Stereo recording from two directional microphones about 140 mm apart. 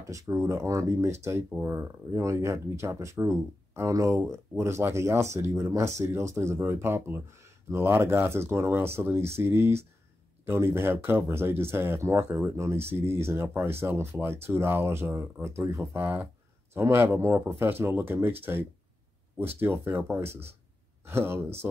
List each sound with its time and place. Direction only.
0.0 s speech: 20° right (ahead or behind)